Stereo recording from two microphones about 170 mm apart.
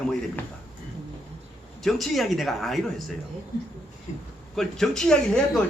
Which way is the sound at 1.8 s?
Centre (ahead or behind).